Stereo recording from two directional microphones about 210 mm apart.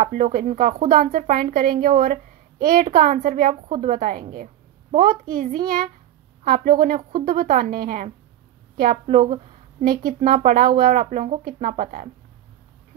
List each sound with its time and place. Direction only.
0.0 s a child's voice: 40° right (ahead or behind)